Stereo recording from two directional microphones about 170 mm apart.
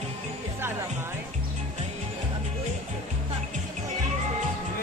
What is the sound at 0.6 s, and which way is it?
Music, 15° right (ahead or behind).